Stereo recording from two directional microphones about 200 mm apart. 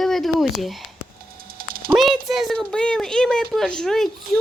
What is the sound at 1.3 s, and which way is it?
Dog, 45° right (ahead or behind).